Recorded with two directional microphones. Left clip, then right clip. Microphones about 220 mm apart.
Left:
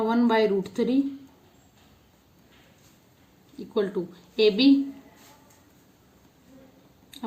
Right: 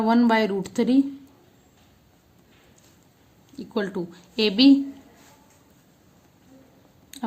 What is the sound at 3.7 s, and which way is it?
Speech, 40° right (ahead or behind).